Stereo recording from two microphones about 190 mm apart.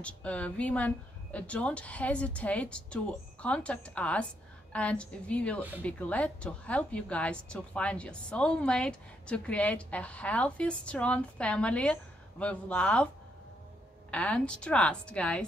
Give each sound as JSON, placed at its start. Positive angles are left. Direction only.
{"t": 0.0, "sound": "a woman's voice", "side_deg": 5}
{"t": 14.1, "sound": "a woman's voice", "side_deg": 5}